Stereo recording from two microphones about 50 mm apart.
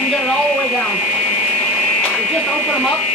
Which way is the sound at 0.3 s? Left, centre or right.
Centre.